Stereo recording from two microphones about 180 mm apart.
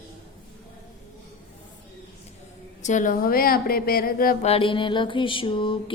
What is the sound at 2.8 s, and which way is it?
A woman's voice, 45° left (ahead or behind).